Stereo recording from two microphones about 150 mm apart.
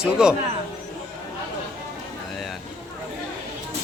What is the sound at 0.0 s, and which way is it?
Speech, 5° right (ahead or behind).